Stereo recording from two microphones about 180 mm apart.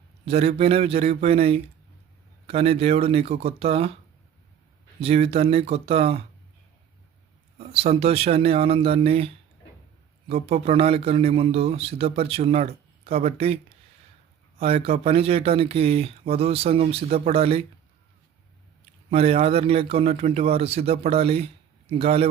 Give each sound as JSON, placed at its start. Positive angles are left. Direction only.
{"t": 0.3, "sound": "speech", "side_deg": -35}
{"t": 4.9, "sound": "speech", "side_deg": -35}
{"t": 7.7, "sound": "speech", "side_deg": -35}
{"t": 19.1, "sound": "speech", "side_deg": -35}